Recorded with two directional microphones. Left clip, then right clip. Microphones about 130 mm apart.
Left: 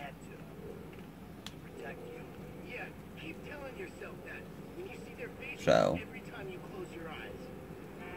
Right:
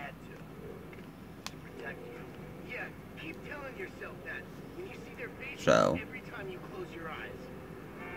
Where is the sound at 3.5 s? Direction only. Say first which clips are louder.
Right 3 dB; 35° right (ahead or behind).